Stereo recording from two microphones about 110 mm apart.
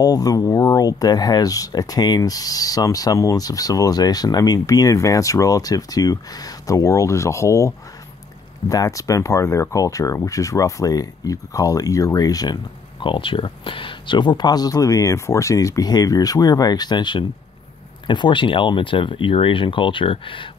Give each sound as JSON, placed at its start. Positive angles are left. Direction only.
{"t": 0.0, "sound": "speech", "side_deg": 35}
{"t": 13.0, "sound": "speech", "side_deg": 50}